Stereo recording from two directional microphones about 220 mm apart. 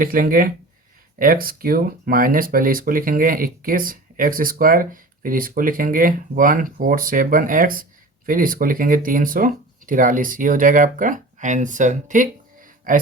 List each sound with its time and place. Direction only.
0.0 s speech: 40° right (ahead or behind)